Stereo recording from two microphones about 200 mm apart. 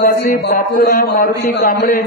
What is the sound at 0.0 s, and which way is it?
A man's voice, 50° left (ahead or behind).